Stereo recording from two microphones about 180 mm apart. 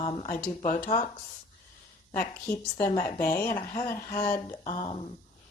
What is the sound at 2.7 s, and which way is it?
A woman's voice, 15° left (ahead or behind).